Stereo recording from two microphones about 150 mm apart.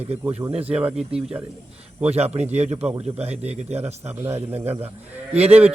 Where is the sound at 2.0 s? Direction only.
45° right (ahead or behind).